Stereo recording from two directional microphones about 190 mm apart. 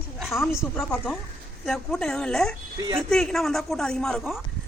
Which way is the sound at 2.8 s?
20° right (ahead or behind).